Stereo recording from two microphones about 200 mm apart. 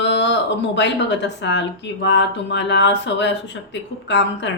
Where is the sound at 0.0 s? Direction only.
60° left (ahead or behind).